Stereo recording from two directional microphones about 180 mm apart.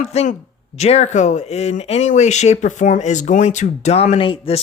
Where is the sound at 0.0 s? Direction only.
40° left (ahead or behind).